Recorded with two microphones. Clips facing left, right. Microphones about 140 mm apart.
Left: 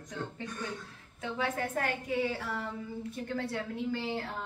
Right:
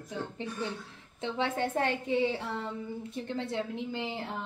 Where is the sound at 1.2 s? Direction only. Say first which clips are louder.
Right 3 dB; 25° right (ahead or behind).